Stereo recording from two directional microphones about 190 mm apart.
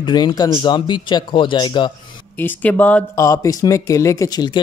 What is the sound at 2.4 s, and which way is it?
Speech, 10° left (ahead or behind).